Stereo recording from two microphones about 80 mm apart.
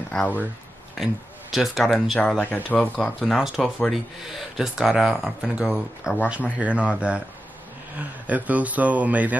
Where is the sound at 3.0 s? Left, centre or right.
Centre.